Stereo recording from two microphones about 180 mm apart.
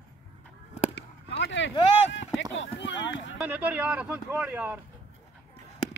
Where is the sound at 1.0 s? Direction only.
85° left.